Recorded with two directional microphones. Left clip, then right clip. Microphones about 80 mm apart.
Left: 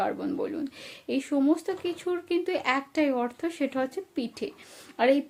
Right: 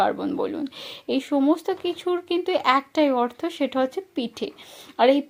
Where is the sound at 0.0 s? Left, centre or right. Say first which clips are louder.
Right 6 dB; right.